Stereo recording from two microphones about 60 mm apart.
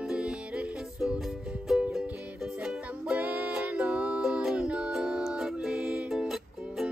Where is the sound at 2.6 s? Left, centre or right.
Centre.